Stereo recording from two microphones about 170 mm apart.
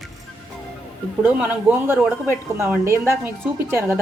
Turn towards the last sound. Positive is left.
turn(degrees=-15)  # may be behind; listen again after turning